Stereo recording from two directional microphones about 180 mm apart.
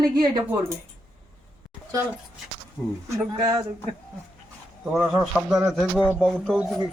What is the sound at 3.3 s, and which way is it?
Speech, 25° right (ahead or behind).